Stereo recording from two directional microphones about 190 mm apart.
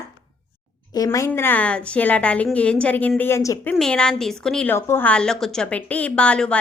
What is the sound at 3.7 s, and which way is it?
A woman's voice, 5° left (ahead or behind).